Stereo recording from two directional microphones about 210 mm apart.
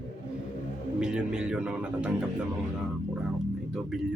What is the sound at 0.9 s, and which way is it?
Speech, 5° right (ahead or behind).